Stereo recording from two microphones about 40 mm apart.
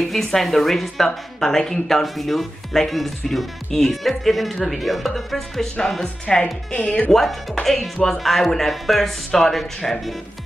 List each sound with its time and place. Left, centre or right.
0.0 s speech: centre
6.2 s speech: left
7.1 s speech: centre